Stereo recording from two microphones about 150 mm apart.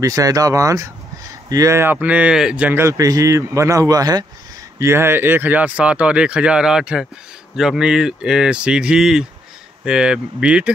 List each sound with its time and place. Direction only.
0.0 s speech: 25° right (ahead or behind); by 10.7 s 5° right (ahead or behind)